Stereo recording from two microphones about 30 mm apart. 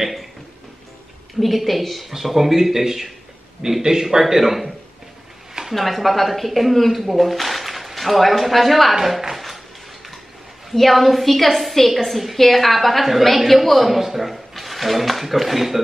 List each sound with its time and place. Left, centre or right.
0.0 s speech: centre
1.4 s a man's voice: centre
5.8 s speech: centre
10.7 s a man's voice: centre